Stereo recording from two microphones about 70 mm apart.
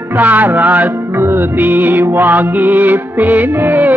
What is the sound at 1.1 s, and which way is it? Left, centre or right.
Music, right.